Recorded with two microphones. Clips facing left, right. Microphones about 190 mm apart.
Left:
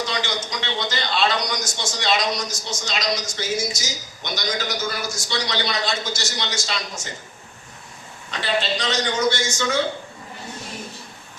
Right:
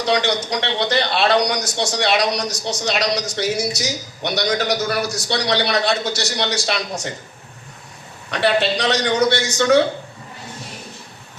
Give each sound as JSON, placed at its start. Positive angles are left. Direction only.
{"t": 0.0, "sound": "a man's voice", "side_deg": -65}
{"t": 8.3, "sound": "a man's voice", "side_deg": -65}